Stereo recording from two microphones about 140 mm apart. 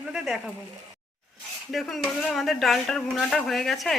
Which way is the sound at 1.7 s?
Centre (ahead or behind).